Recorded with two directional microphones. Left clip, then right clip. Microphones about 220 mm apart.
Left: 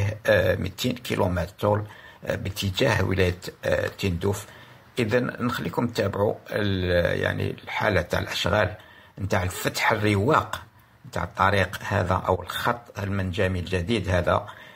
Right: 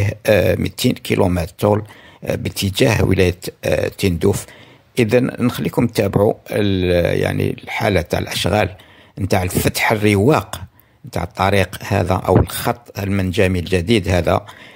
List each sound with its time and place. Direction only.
0.0 s speech: 45° right (ahead or behind)